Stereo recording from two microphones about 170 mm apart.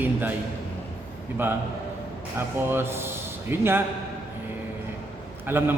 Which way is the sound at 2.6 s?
15° right (ahead or behind).